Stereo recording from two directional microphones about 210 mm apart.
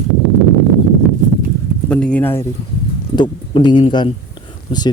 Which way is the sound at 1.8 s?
5° left (ahead or behind).